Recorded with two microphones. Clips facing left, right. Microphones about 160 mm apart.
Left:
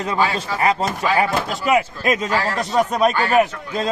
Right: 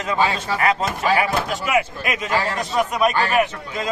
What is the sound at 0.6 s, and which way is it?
Speech, 30° left (ahead or behind).